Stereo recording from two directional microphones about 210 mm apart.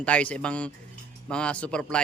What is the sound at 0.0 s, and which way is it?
A man's voice, 5° left (ahead or behind).